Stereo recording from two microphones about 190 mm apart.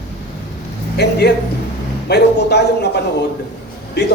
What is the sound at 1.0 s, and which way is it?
A man's voice, 60° left (ahead or behind).